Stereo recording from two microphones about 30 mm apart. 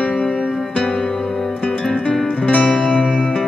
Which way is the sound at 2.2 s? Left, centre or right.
Centre.